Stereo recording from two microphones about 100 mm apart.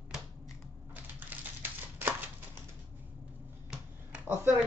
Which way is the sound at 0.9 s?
15° right (ahead or behind).